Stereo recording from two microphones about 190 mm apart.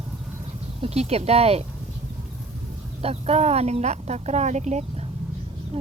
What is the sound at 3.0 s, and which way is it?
Speech, 30° right (ahead or behind).